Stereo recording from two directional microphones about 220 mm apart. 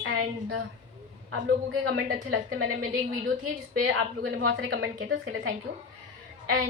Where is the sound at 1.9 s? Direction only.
45° right (ahead or behind).